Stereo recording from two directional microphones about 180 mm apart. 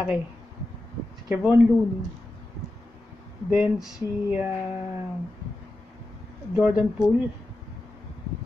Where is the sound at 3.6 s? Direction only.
5° right (ahead or behind).